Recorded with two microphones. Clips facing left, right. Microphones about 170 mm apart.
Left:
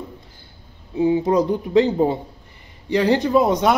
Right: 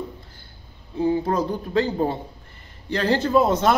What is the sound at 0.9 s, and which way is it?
A man's voice, 20° left (ahead or behind).